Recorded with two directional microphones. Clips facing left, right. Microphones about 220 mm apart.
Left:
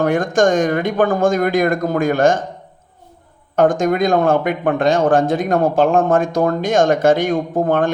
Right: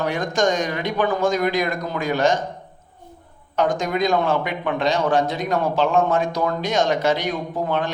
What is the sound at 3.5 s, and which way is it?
Speech, 50° left (ahead or behind).